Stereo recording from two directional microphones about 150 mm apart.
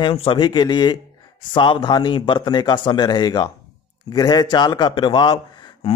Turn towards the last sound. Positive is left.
turn(degrees=30)  # may be behind; listen again after turning